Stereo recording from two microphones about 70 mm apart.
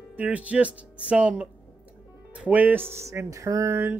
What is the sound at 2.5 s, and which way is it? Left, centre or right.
Speech, right.